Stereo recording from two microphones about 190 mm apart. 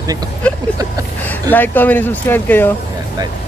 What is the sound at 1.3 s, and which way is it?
Speech, 10° left (ahead or behind).